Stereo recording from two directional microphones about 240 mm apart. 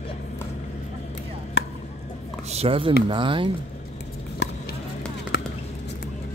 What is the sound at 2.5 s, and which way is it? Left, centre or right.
Speech, right.